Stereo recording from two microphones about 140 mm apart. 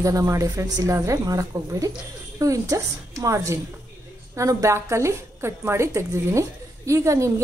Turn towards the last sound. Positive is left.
turn(degrees=-20)  # may be behind; listen again after turning